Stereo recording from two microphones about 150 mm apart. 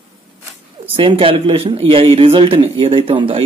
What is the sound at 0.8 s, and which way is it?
Speech, 35° right (ahead or behind).